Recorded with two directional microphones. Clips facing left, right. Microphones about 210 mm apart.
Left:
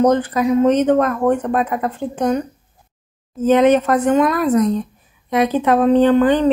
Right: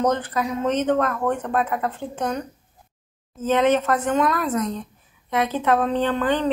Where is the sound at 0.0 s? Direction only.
10° left (ahead or behind).